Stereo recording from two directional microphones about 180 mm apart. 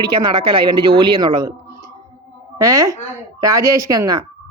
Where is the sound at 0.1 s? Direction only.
25° right (ahead or behind).